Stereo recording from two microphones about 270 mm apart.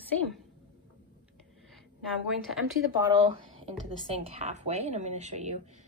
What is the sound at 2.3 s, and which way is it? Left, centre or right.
Speech, centre.